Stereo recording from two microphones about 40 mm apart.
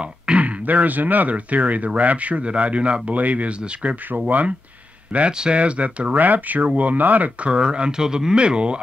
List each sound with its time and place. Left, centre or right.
0.0 s speech: right
5.4 s speech: right
6.1 s speech: right
7.5 s speech: right